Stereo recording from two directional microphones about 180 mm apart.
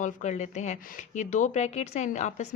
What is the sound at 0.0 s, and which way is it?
A woman's voice, 40° left (ahead or behind).